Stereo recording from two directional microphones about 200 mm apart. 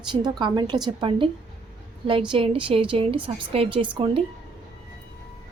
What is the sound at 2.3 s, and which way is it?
A woman's voice, 25° right (ahead or behind).